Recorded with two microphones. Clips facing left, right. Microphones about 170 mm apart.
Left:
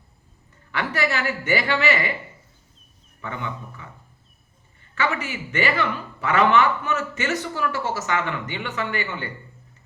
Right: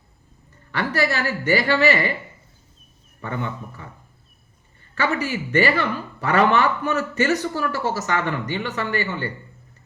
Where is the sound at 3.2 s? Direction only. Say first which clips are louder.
Right 3 dB; 40° right (ahead or behind).